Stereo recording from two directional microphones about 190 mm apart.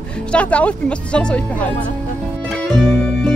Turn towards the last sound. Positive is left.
turn(degrees=5)  # may be behind; listen again after turning